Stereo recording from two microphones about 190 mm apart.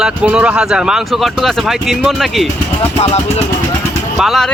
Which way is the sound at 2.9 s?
30° left (ahead or behind).